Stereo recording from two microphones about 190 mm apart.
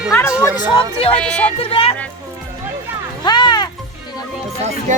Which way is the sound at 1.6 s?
30° left (ahead or behind).